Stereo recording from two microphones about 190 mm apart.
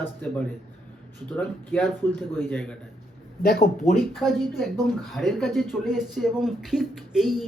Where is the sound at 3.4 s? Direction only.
55° left (ahead or behind).